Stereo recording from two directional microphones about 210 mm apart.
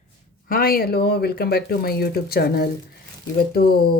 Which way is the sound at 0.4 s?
45° left (ahead or behind).